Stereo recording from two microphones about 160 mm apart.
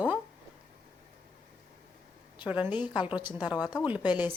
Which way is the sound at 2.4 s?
10° right (ahead or behind).